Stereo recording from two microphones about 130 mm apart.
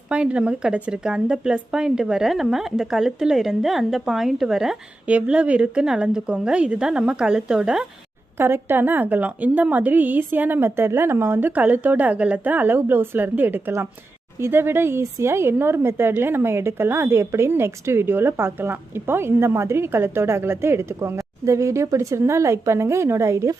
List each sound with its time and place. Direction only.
0.1 s speech: 10° right (ahead or behind)
8.4 s a woman's voice: 20° right (ahead or behind)